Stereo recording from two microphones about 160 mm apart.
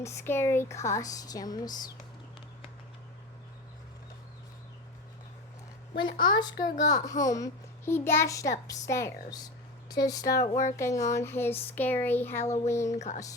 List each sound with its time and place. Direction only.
0.0 s a child's voice: 15° left (ahead or behind)
6.0 s a child's voice: 30° left (ahead or behind)